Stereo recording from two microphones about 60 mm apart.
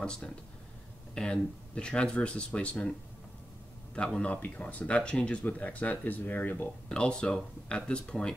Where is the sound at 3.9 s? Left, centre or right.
Centre; by 6.6 s left.